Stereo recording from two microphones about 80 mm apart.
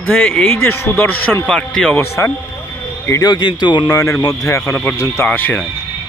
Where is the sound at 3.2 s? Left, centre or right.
Left.